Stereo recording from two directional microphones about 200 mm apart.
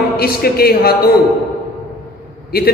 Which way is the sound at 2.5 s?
50° left (ahead or behind).